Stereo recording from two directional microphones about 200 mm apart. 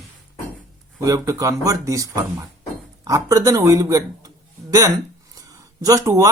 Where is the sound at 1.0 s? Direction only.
15° right (ahead or behind).